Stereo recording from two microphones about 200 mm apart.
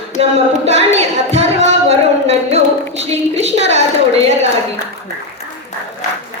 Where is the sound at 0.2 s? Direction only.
30° right (ahead or behind).